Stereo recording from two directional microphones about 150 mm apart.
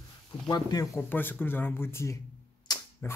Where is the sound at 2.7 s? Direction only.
30° left (ahead or behind).